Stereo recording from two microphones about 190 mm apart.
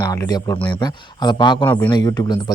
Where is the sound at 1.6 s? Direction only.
10° left (ahead or behind).